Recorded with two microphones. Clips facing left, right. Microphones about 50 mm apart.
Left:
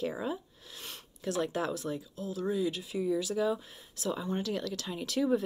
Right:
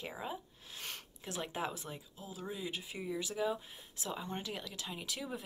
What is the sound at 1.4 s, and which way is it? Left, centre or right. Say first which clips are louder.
Speech: left 6 dB; centre.